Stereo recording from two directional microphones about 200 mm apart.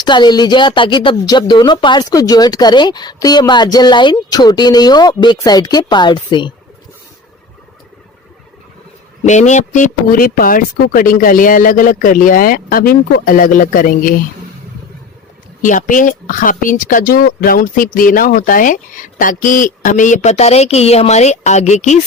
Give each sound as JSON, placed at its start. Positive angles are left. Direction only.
{"t": 0.0, "sound": "speech", "side_deg": 20}
{"t": 9.2, "sound": "speech", "side_deg": 35}
{"t": 15.6, "sound": "speech", "side_deg": 40}